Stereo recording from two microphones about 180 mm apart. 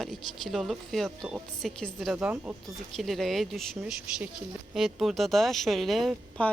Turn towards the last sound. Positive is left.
turn(degrees=5)  # may be behind; listen again after turning